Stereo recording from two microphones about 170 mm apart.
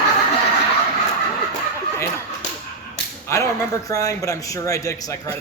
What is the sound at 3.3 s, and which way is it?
A man's voice, 20° left (ahead or behind).